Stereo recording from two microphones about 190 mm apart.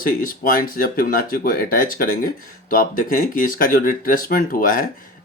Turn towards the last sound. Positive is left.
turn(degrees=45)  # may be behind; listen again after turning